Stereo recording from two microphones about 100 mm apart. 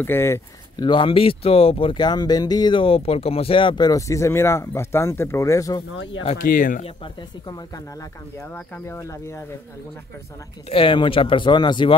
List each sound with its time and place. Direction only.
0.0 s speech: 25° left (ahead or behind)
0.7 s speech: 55° left (ahead or behind)
2.0 s speech: 45° left (ahead or behind)
2.7 s speech: 65° left (ahead or behind); by 5.9 s 35° left (ahead or behind)
7.2 s speech: 40° left (ahead or behind)
8.5 s speech: 20° left (ahead or behind)
10.7 s speech: 60° left (ahead or behind)